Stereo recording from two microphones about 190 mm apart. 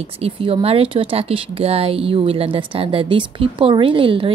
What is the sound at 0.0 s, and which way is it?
Speech, 30° right (ahead or behind).